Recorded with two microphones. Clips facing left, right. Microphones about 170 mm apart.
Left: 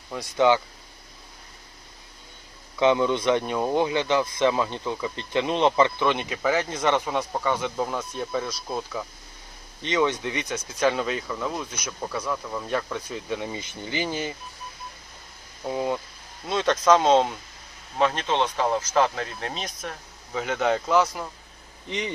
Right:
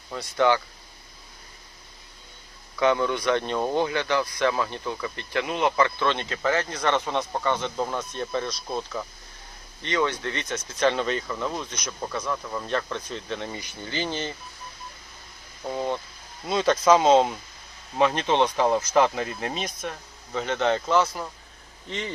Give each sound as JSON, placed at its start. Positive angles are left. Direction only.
{"t": 0.2, "sound": "speech", "side_deg": 15}
{"t": 2.7, "sound": "speech", "side_deg": 20}
{"t": 9.8, "sound": "speech", "side_deg": 15}
{"t": 15.6, "sound": "speech", "side_deg": 10}
{"t": 17.9, "sound": "speech", "side_deg": -15}
{"t": 21.8, "sound": "speech", "side_deg": 15}